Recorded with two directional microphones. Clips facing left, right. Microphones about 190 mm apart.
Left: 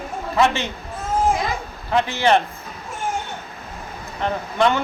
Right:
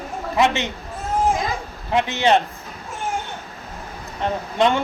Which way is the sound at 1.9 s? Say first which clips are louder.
Even; 20° right (ahead or behind).